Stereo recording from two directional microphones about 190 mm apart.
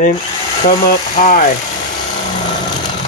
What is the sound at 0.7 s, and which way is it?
Speech, 45° left (ahead or behind).